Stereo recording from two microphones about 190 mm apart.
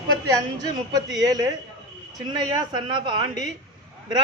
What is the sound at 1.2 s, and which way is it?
Speech, 20° right (ahead or behind).